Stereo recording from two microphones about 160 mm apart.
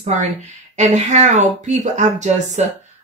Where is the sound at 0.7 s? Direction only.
45° right (ahead or behind).